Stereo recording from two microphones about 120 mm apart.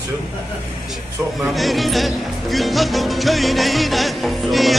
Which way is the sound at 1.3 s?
Centre (ahead or behind).